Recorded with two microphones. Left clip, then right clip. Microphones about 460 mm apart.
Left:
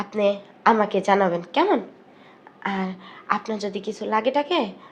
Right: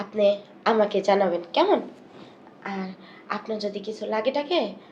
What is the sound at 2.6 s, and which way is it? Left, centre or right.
A woman's voice, left.